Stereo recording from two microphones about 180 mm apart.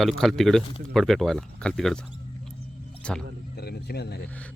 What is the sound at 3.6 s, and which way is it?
Speech, 60° left (ahead or behind).